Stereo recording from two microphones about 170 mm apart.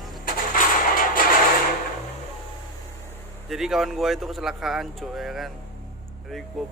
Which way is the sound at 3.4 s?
Centre (ahead or behind).